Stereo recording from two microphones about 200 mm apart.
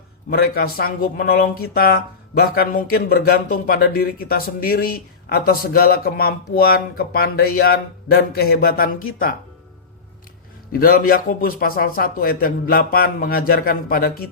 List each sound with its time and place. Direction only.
0.3 s speech: 50° left (ahead or behind)
10.7 s speech: 45° left (ahead or behind)